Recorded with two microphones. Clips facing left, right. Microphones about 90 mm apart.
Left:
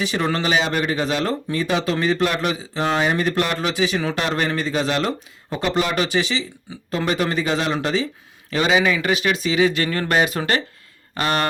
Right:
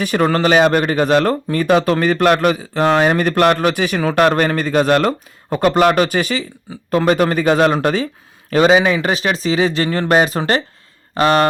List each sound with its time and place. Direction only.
0.0 s speech: 50° right (ahead or behind)
8.4 s speech: 40° right (ahead or behind)